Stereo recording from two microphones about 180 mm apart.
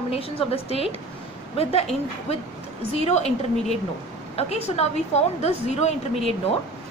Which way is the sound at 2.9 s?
35° left (ahead or behind).